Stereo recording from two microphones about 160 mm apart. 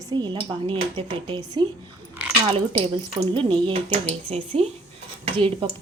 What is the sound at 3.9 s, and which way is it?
Speech, 45° right (ahead or behind).